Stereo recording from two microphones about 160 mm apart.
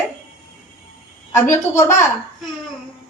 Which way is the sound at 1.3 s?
20° left (ahead or behind).